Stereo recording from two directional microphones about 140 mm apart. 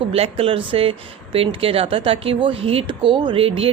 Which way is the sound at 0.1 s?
40° right (ahead or behind).